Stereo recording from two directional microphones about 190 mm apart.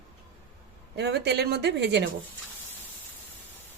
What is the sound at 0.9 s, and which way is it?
Speech, 60° right (ahead or behind).